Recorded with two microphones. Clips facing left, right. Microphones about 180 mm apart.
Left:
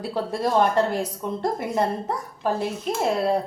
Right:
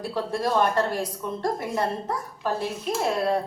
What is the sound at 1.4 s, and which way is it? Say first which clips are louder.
A woman's voice: left 2 dB; 20° left (ahead or behind).